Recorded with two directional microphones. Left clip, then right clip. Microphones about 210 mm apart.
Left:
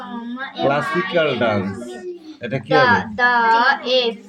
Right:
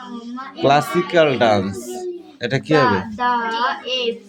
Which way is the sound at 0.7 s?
30° right (ahead or behind).